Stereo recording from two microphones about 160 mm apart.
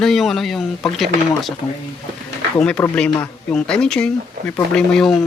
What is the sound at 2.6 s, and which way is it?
Speech, 5° left (ahead or behind).